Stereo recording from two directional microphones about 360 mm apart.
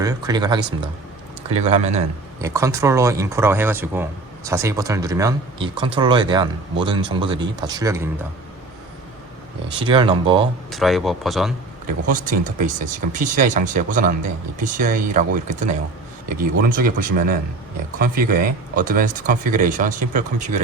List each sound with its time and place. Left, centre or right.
0.0 s speech: centre
9.8 s speech: centre
10.7 s speech: centre
11.9 s speech: right
16.4 s speech: right